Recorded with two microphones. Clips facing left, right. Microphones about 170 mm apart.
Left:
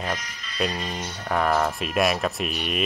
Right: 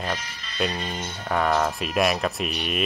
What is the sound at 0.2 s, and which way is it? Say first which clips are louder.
Speech: right 1 dB; 30° right (ahead or behind).